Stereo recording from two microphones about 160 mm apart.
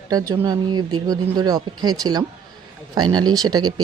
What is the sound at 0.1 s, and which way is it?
Speech, 25° right (ahead or behind).